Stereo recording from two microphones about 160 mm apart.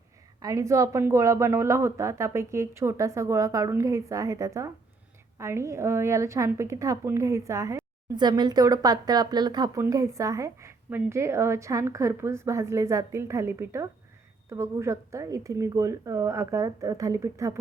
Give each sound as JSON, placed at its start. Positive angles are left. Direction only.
{"t": 0.3, "sound": "a woman's voice", "side_deg": -20}